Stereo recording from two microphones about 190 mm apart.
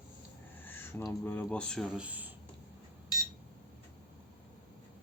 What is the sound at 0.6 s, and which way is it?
Speech, 10° left (ahead or behind).